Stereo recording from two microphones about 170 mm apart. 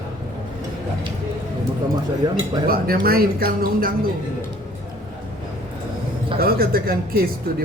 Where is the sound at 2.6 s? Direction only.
60° right (ahead or behind).